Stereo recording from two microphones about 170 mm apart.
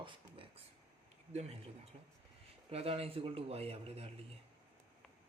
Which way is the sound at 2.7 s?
35° right (ahead or behind).